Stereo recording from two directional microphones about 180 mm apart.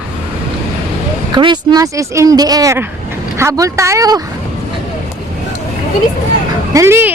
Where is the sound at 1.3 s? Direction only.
25° right (ahead or behind).